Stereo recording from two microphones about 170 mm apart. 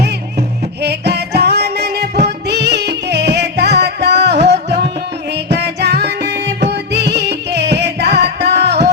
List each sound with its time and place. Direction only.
0.8 s music: 75° right (ahead or behind)
2.5 s music: 85° right